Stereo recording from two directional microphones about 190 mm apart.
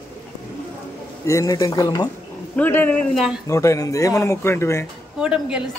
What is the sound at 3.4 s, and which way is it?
Speech, 15° left (ahead or behind).